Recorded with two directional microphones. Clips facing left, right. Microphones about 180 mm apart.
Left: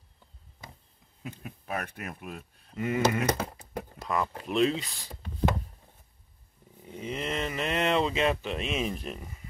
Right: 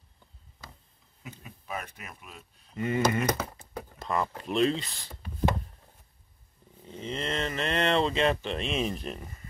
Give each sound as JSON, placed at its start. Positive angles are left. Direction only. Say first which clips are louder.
{"t": 1.2, "sound": "speech", "louder": "left 5 dB", "side_deg": 60}
{"t": 2.7, "sound": "speech", "louder": "even", "side_deg": 5}
{"t": 6.8, "sound": "speech", "louder": "even", "side_deg": 10}